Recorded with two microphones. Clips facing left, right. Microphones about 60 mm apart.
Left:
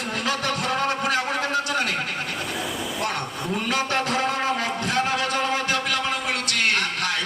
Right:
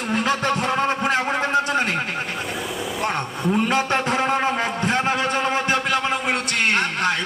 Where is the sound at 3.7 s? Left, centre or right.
Right.